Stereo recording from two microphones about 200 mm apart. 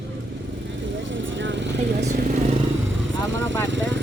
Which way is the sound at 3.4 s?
65° right (ahead or behind).